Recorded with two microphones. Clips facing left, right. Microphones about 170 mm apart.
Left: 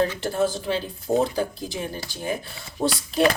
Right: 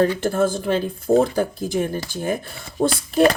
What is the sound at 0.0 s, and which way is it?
Speech, 50° right (ahead or behind).